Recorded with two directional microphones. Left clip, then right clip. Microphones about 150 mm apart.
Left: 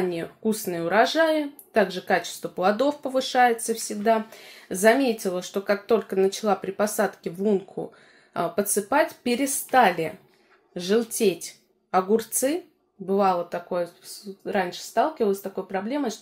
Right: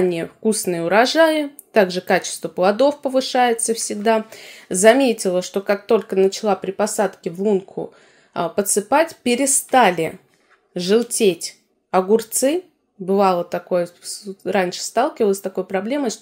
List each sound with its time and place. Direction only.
0.1 s speech: 50° right (ahead or behind)